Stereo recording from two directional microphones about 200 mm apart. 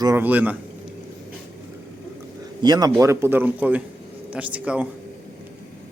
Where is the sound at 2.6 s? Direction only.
20° right (ahead or behind).